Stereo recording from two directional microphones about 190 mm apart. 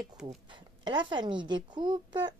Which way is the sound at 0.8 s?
25° right (ahead or behind).